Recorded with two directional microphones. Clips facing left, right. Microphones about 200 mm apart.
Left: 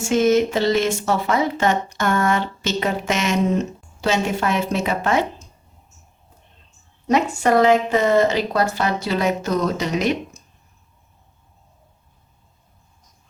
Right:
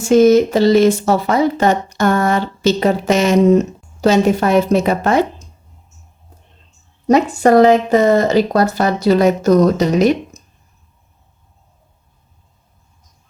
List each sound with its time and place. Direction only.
0.1 s speech: 40° right (ahead or behind)
7.1 s speech: 40° right (ahead or behind)